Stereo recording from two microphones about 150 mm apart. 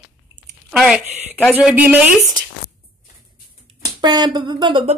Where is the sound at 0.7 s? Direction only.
Centre (ahead or behind).